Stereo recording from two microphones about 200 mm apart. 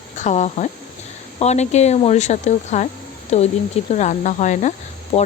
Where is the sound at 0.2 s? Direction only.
35° left (ahead or behind).